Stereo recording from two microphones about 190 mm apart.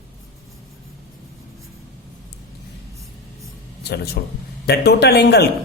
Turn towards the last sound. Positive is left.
turn(degrees=60)  # may be behind; listen again after turning